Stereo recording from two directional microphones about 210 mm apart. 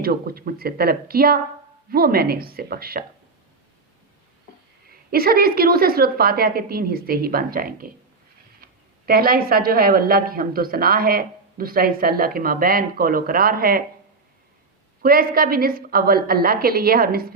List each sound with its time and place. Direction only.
0.0 s a woman's voice: 45° right (ahead or behind)
4.9 s a woman's voice: 45° right (ahead or behind)
9.0 s a woman's voice: 45° right (ahead or behind)
15.0 s a woman's voice: 45° right (ahead or behind)